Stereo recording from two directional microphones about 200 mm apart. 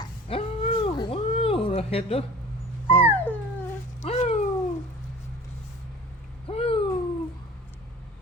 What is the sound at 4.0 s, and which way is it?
Cat, 35° left (ahead or behind).